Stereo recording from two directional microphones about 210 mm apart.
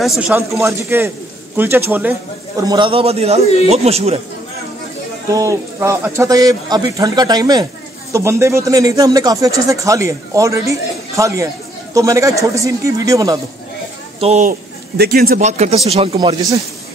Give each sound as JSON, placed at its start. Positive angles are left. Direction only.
{"t": 0.0, "sound": "a man's voice", "side_deg": -5}
{"t": 5.3, "sound": "speech", "side_deg": -15}
{"t": 14.2, "sound": "speech", "side_deg": -35}
{"t": 15.4, "sound": "a man's voice", "side_deg": -35}